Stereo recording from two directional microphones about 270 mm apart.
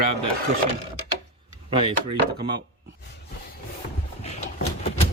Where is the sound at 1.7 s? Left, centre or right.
Centre.